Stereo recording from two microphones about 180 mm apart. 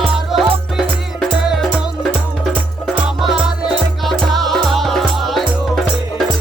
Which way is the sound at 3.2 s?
Centre (ahead or behind).